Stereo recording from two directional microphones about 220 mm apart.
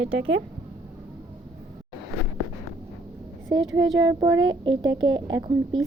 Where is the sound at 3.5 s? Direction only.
15° right (ahead or behind).